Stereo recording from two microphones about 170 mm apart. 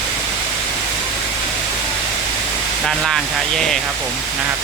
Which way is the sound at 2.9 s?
Centre (ahead or behind).